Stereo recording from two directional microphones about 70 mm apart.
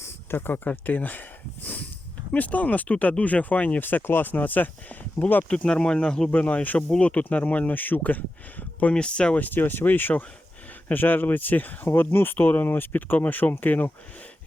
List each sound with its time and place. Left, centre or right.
0.0 s speech: left
2.3 s speech: left
5.5 s speech: centre
6.3 s speech: left